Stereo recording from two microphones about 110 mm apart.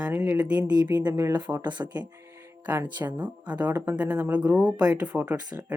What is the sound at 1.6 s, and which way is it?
Speech, 45° right (ahead or behind).